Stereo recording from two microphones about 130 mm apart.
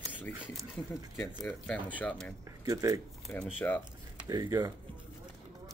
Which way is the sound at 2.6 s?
25° right (ahead or behind).